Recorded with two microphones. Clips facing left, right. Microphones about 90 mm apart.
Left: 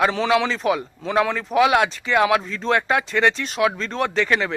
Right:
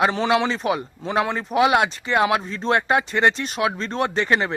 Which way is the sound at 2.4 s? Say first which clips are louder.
Even; 35° right (ahead or behind).